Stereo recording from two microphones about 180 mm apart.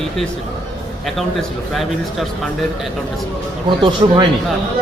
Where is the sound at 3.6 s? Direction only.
25° right (ahead or behind).